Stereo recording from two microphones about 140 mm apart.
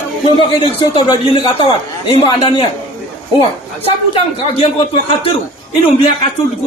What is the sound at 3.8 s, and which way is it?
Speech, 45° left (ahead or behind).